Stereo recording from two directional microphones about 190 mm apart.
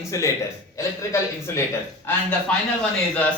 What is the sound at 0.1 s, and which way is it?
Speech, 15° left (ahead or behind).